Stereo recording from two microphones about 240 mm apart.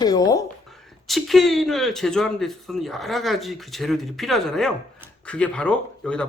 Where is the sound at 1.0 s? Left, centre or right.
Centre.